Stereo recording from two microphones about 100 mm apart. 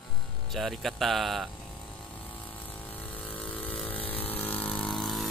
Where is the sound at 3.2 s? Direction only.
15° left (ahead or behind).